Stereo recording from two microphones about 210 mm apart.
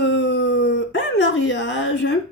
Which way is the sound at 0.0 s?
55° left (ahead or behind).